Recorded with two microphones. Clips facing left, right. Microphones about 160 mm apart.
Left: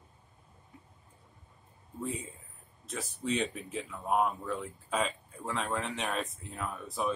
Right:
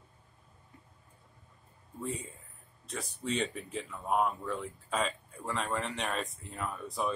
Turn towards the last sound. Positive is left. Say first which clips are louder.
# left 1 dB
turn(degrees=0)  # may be behind; listen again after turning